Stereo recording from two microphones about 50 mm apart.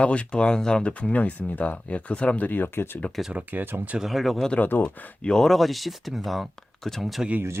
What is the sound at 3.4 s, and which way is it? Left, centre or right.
Speech, right.